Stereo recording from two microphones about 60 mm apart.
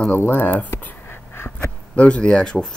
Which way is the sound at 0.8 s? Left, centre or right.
Left.